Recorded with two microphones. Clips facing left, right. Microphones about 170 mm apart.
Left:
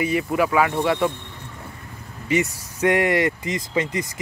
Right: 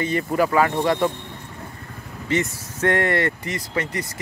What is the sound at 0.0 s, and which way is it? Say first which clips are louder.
Speech: even; 10° left (ahead or behind).